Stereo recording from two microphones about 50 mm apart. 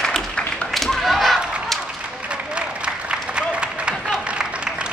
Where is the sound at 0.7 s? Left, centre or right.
Centre.